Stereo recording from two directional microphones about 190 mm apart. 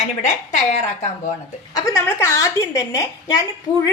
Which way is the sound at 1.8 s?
15° left (ahead or behind).